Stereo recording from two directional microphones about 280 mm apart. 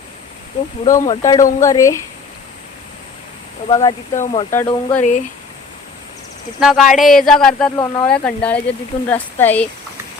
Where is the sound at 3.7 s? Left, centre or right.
Centre.